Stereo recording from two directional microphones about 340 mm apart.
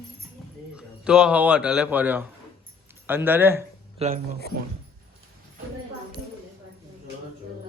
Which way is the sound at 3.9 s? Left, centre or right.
Centre.